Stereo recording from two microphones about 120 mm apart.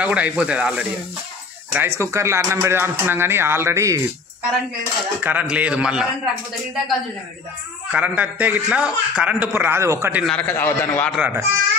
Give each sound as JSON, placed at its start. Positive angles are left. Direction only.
{"t": 0.0, "sound": "a man's voice", "side_deg": -10}
{"t": 1.7, "sound": "speech", "side_deg": -20}
{"t": 5.2, "sound": "a man's voice", "side_deg": -15}
{"t": 7.9, "sound": "a man's voice", "side_deg": -15}
{"t": 10.2, "sound": "a man's voice", "side_deg": 10}
{"t": 11.1, "sound": "a man's voice", "side_deg": -15}